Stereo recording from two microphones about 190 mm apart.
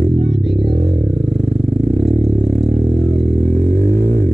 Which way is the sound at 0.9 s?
50° right (ahead or behind).